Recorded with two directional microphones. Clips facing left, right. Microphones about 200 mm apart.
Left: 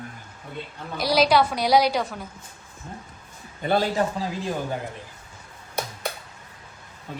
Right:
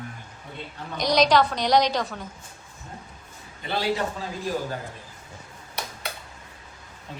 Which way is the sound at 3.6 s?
45° left (ahead or behind).